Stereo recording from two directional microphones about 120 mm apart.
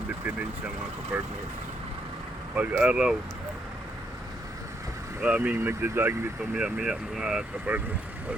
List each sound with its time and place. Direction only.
1.1 s speech: 10° right (ahead or behind)
2.6 s speech: 10° right (ahead or behind)
5.2 s speech: 10° right (ahead or behind)
6.5 s speech: 5° right (ahead or behind)